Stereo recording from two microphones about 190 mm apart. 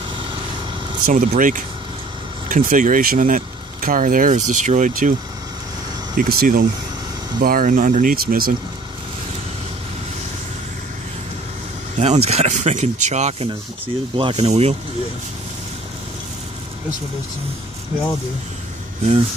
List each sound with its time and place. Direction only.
1.0 s speech: 45° right (ahead or behind)
6.1 s speech: 50° right (ahead or behind)
12.0 s speech: 35° right (ahead or behind)